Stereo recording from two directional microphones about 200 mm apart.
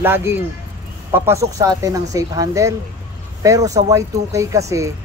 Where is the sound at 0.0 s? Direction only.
10° right (ahead or behind).